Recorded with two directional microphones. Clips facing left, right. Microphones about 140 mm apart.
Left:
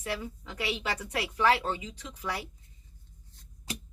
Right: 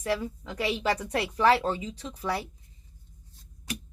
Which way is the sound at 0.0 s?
35° right (ahead or behind).